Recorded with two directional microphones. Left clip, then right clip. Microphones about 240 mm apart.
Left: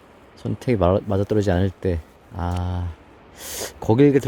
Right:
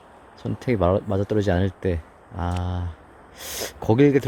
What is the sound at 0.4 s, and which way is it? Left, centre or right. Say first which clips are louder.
Speech: left 2 dB; centre.